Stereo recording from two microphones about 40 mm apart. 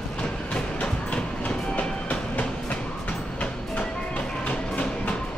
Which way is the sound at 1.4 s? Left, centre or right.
Left.